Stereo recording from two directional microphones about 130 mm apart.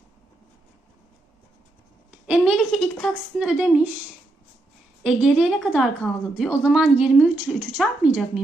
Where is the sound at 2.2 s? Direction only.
5° right (ahead or behind).